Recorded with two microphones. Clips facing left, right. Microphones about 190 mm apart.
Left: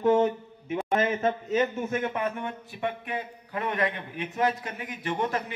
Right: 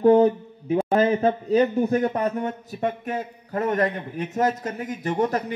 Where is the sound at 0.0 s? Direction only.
35° right (ahead or behind).